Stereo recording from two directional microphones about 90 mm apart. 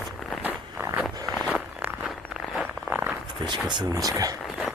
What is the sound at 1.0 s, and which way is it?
Walk, centre (ahead or behind).